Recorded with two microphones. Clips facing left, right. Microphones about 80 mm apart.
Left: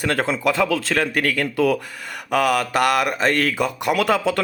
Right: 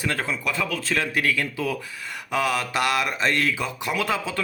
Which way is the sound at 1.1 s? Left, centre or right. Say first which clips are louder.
Left 3 dB; left.